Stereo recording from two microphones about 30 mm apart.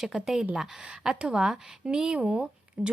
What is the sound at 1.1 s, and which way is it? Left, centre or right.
A woman's voice, right.